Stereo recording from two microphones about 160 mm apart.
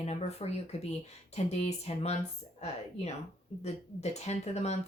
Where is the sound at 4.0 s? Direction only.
45° left (ahead or behind).